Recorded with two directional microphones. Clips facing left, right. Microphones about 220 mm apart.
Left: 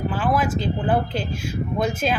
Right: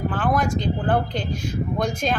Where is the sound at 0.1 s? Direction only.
5° left (ahead or behind).